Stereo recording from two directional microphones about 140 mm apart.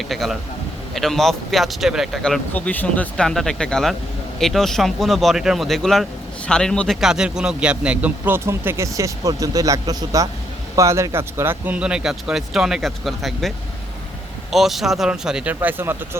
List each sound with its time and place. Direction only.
0.1 s a man's voice: centre (ahead or behind)
14.5 s speech: centre (ahead or behind)